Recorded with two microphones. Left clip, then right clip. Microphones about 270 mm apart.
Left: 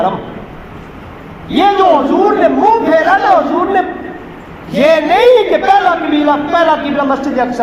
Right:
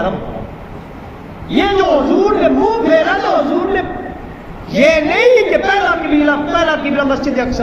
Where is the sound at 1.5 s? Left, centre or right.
Centre.